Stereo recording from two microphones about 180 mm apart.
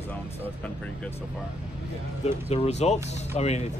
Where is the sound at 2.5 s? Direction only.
40° left (ahead or behind).